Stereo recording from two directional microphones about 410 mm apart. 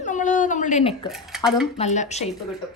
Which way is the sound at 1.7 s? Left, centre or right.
Centre.